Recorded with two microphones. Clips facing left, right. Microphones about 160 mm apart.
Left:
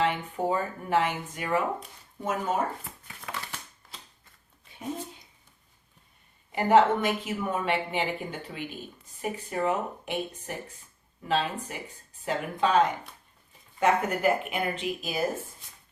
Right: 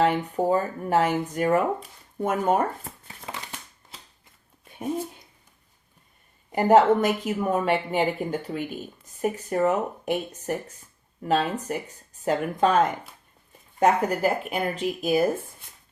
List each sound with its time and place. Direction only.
0.0 s speech: 40° right (ahead or behind)
2.2 s speech: 55° right (ahead or behind)
3.2 s crumpling: 20° right (ahead or behind)
4.6 s a sound: 55° right (ahead or behind)
6.5 s speech: 45° right (ahead or behind)